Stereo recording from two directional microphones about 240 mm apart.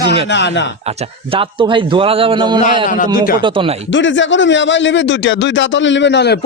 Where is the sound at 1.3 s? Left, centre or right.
Right.